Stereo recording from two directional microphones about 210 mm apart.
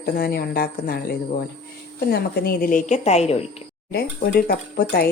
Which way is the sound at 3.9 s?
45° left (ahead or behind).